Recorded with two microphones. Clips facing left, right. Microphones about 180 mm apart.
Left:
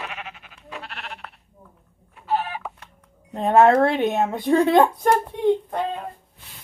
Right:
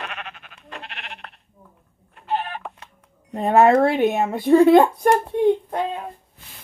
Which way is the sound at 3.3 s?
Centre (ahead or behind).